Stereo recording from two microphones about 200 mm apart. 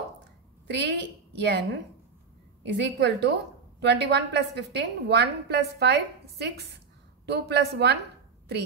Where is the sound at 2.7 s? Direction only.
60° right (ahead or behind).